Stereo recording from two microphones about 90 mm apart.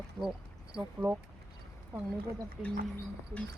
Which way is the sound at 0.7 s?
15° right (ahead or behind).